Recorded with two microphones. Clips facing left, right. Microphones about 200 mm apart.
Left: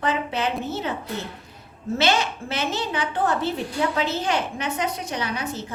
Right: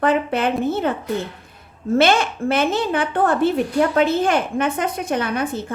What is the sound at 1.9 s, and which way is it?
Speech, 55° right (ahead or behind).